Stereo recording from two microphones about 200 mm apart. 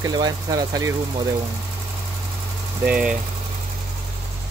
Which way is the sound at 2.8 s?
5° right (ahead or behind).